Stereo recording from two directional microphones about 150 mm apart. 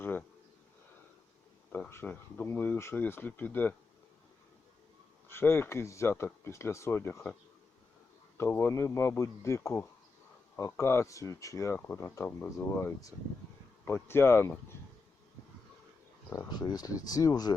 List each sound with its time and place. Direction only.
0.0 s a sound: 15° left (ahead or behind)
1.7 s speech: 15° left (ahead or behind)
5.3 s speech: 15° left (ahead or behind)
8.4 s speech: 15° left (ahead or behind)
16.3 s speech: 25° left (ahead or behind)